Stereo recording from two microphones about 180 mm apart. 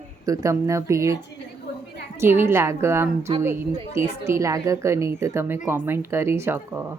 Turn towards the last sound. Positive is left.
turn(degrees=-10)  # may be behind; listen again after turning